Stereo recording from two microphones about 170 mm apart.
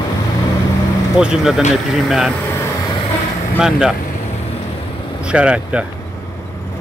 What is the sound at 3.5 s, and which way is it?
Speech, 5° right (ahead or behind).